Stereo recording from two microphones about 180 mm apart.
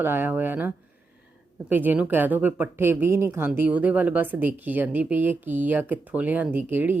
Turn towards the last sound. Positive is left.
turn(degrees=-10)  # may be behind; listen again after turning